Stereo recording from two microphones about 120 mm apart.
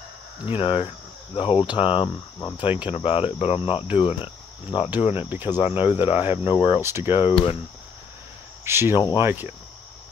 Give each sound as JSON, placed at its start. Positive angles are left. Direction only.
{"t": 0.5, "sound": "speech", "side_deg": 50}
{"t": 3.9, "sound": "cricket", "side_deg": 45}
{"t": 5.3, "sound": "speech", "side_deg": -15}
{"t": 5.6, "sound": "speech", "side_deg": 55}
{"t": 6.8, "sound": "speech", "side_deg": -20}
{"t": 7.1, "sound": "speech", "side_deg": 45}
{"t": 8.6, "sound": "cricket", "side_deg": -20}
{"t": 8.9, "sound": "speech", "side_deg": 35}
{"t": 9.2, "sound": "speech", "side_deg": -15}